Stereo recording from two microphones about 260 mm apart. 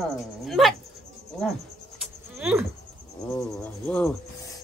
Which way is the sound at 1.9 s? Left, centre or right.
Centre.